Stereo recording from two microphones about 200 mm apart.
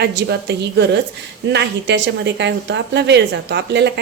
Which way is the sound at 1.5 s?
60° right (ahead or behind).